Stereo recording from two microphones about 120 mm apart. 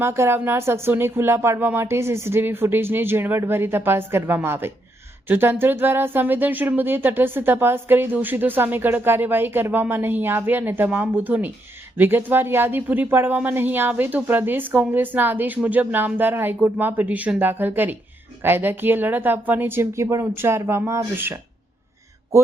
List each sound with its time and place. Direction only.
0.0 s speech: 20° right (ahead or behind)